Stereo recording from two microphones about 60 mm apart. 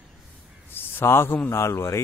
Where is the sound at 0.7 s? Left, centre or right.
Left.